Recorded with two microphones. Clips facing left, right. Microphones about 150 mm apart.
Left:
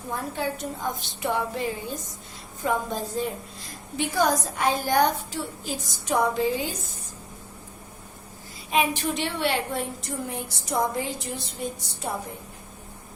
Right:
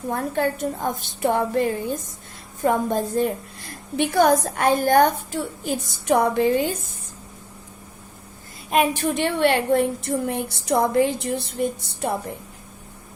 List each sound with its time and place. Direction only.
0.1 s a woman's voice: 55° right (ahead or behind)
8.7 s a woman's voice: 50° right (ahead or behind)